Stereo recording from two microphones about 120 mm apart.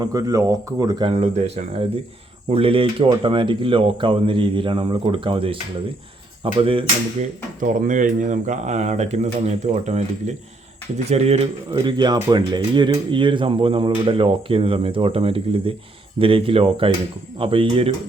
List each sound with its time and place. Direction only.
0.0 s speech: 30° right (ahead or behind)
1.2 s speech: 65° right (ahead or behind)
2.5 s speech: 50° right (ahead or behind)
7.2 s speech: 90° right; by 10.3 s 75° right (ahead or behind)
11.1 s speech: 60° right (ahead or behind)
11.7 s speech: 45° right (ahead or behind)